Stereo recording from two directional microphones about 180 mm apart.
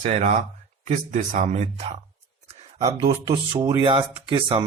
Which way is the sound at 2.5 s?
35° right (ahead or behind).